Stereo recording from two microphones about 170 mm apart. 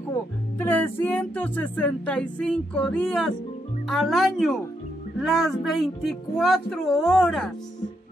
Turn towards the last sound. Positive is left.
turn(degrees=5)  # may be behind; listen again after turning